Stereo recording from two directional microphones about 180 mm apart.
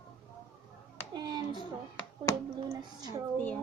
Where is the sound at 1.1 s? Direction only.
25° right (ahead or behind).